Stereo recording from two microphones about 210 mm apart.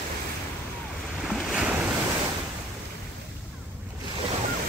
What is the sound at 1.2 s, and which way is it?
Waves, centre (ahead or behind).